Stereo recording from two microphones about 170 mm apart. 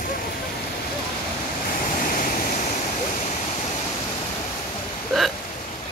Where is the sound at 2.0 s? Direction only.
55° left (ahead or behind).